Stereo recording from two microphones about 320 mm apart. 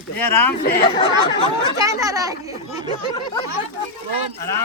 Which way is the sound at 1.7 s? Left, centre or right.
Centre.